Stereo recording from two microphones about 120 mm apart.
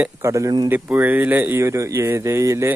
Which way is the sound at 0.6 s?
15° right (ahead or behind).